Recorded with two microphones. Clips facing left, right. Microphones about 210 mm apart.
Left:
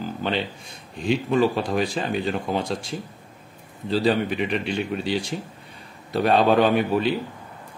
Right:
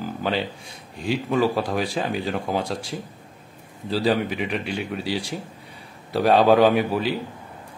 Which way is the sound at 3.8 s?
5° right (ahead or behind).